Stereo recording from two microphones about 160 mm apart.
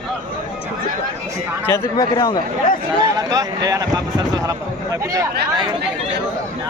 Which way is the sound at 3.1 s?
20° right (ahead or behind).